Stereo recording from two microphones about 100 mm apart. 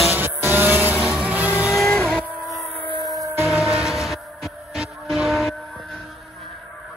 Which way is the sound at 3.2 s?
25° right (ahead or behind).